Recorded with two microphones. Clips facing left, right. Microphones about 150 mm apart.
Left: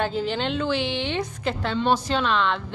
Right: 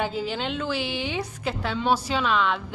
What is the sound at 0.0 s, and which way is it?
A woman's voice, 5° right (ahead or behind).